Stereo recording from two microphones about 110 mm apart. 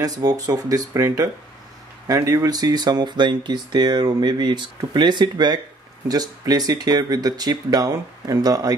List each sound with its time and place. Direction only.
0.0 s speech: 35° right (ahead or behind)